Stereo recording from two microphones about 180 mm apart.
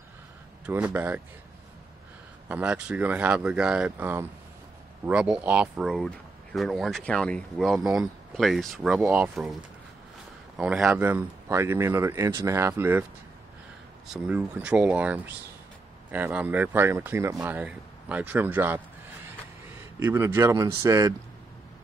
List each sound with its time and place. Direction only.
0.7 s speech: 10° right (ahead or behind)
2.4 s speech: 5° right (ahead or behind)
10.6 s speech: 5° right (ahead or behind)
14.0 s speech: 5° right (ahead or behind)
20.0 s speech: 15° right (ahead or behind)